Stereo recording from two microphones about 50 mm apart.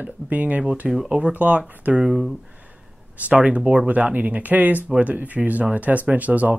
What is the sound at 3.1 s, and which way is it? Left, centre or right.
Speech, right.